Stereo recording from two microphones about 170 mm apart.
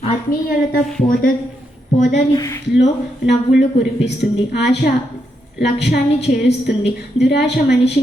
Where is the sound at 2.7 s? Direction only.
85° left.